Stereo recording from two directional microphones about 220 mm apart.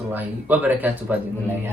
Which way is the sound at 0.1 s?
10° right (ahead or behind).